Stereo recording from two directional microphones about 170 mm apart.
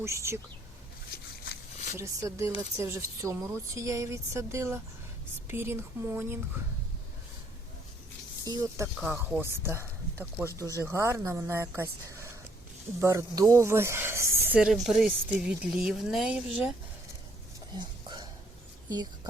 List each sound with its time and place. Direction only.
0.0 s speech: 15° right (ahead or behind)
2.0 s speech: 20° right (ahead or behind)
8.4 s speech: 20° right (ahead or behind)
14.6 s speech: centre (ahead or behind)
17.7 s a sound: 25° right (ahead or behind)